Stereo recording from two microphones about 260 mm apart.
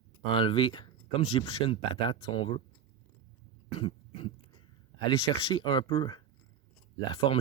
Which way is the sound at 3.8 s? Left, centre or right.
Centre.